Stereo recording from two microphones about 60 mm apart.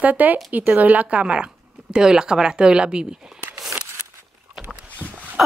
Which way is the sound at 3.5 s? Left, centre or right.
Centre.